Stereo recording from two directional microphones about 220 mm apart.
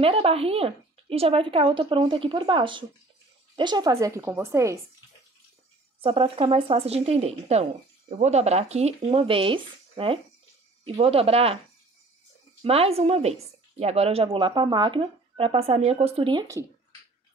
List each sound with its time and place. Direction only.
0.0 s a woman's voice: 25° right (ahead or behind)
5.9 s speech: 25° right (ahead or behind)
12.6 s speech: 25° right (ahead or behind)